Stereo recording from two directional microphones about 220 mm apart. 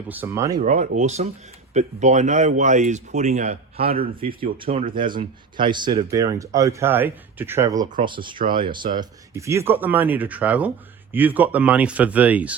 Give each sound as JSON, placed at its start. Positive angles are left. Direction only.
{"t": 0.1, "sound": "speech", "side_deg": -10}
{"t": 0.6, "sound": "speech", "side_deg": -35}
{"t": 5.5, "sound": "speech", "side_deg": -20}
{"t": 8.4, "sound": "speech", "side_deg": -40}
{"t": 9.0, "sound": "speech", "side_deg": -15}